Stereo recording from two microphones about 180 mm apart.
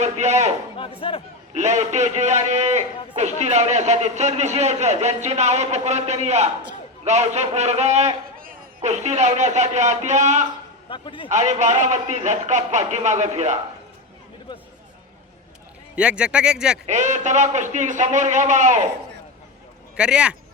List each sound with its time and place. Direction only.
0.0 s a man's voice: 40° right (ahead or behind)
0.8 s speech: 30° left (ahead or behind)
1.5 s a man's voice: 40° right (ahead or behind)
10.8 s a man's voice: 25° left (ahead or behind)
11.3 s a man's voice: 40° right (ahead or behind)
16.0 s speech: 5° right (ahead or behind)
16.8 s a man's voice: 40° right (ahead or behind)
20.0 s speech: 5° right (ahead or behind)